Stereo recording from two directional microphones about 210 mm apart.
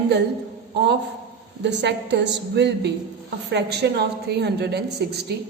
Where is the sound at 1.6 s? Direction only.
55° right (ahead or behind).